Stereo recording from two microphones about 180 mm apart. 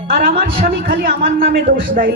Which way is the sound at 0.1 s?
55° right (ahead or behind).